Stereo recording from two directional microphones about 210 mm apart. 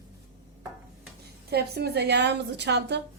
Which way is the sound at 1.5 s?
50° right (ahead or behind).